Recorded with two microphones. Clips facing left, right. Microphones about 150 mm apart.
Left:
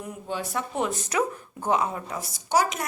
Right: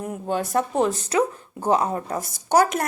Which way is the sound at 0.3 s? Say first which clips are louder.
Right 7 dB; 45° right (ahead or behind).